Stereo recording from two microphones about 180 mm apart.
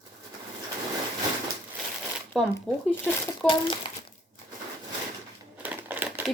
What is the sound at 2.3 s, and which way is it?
Speech, centre (ahead or behind).